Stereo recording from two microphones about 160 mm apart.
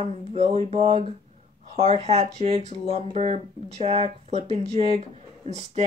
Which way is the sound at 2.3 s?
40° right (ahead or behind).